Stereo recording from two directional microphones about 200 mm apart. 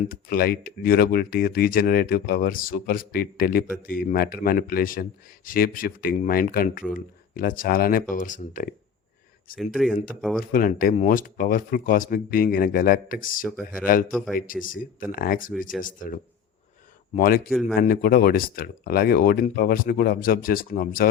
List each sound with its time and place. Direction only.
0.1 s speech: 45° left (ahead or behind)
9.6 s speech: centre (ahead or behind)
10.5 s speech: 45° left (ahead or behind)
14.1 s speech: centre (ahead or behind)
14.3 s speech: 45° left (ahead or behind)
17.5 s speech: centre (ahead or behind)
17.7 s speech: 50° left (ahead or behind)